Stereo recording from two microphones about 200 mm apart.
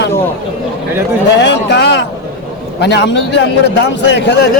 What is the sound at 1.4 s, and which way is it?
A man's voice, 60° left (ahead or behind).